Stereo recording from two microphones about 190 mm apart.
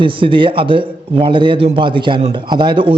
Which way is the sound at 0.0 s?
25° right (ahead or behind).